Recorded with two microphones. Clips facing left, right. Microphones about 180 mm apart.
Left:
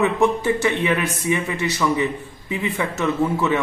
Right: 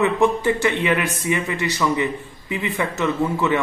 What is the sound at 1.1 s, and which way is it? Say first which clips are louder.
Speech: left 1 dB; 20° left (ahead or behind).